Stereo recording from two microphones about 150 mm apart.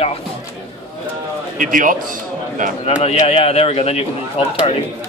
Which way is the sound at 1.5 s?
65° right (ahead or behind).